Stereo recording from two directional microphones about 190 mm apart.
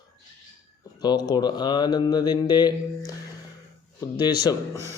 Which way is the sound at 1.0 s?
20° left (ahead or behind).